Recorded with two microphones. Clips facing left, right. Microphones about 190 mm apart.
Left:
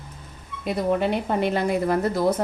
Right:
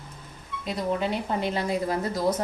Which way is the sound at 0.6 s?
60° left (ahead or behind).